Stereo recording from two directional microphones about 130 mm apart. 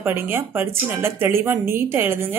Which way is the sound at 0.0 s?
20° right (ahead or behind).